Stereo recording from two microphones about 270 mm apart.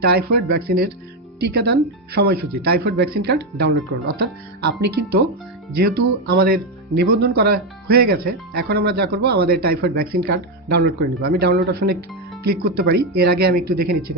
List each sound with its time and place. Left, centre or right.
0.0 s speech: right